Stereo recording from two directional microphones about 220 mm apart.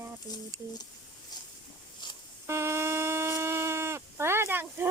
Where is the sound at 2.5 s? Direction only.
10° right (ahead or behind).